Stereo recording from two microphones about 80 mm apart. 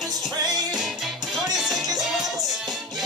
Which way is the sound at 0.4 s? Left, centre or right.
Right.